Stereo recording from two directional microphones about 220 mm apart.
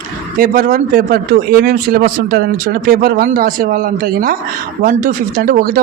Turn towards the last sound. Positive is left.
turn(degrees=-40)  # may be behind; listen again after turning